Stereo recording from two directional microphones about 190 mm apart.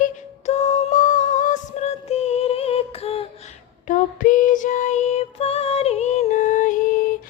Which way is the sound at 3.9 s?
45° left (ahead or behind).